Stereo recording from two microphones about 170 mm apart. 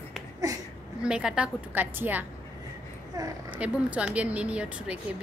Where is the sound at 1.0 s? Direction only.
5° right (ahead or behind).